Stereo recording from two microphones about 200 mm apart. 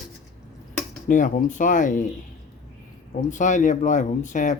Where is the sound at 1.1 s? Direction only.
40° left (ahead or behind).